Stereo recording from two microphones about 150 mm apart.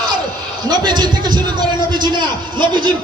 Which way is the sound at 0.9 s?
30° right (ahead or behind).